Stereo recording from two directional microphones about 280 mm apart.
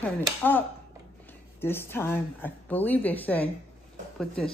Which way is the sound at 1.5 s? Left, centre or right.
Centre.